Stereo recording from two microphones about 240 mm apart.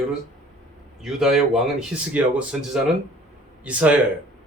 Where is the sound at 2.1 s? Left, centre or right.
Centre.